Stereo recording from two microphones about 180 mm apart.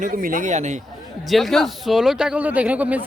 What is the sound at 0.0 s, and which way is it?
Speech, 50° right (ahead or behind).